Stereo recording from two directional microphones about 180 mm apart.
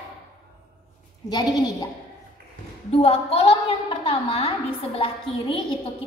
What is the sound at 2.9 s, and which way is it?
A woman's voice, 35° left (ahead or behind).